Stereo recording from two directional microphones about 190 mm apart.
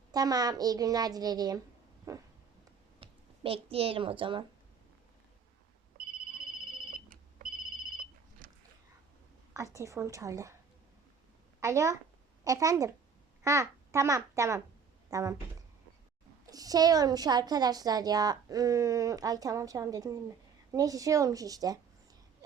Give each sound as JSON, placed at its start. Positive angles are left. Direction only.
{"t": 0.1, "sound": "a woman's voice", "side_deg": -20}
{"t": 3.0, "sound": "a woman's voice", "side_deg": -30}
{"t": 6.0, "sound": "ringtone", "side_deg": -50}
{"t": 9.7, "sound": "speech", "side_deg": -15}
{"t": 11.6, "sound": "a child's voice", "side_deg": -15}
{"t": 16.5, "sound": "a woman's voice", "side_deg": -20}